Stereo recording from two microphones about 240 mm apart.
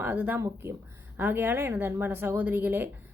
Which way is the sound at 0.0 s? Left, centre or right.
Centre.